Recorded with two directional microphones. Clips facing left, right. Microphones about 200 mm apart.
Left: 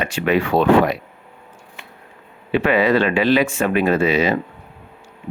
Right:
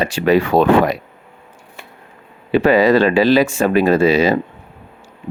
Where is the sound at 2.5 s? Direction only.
40° right (ahead or behind).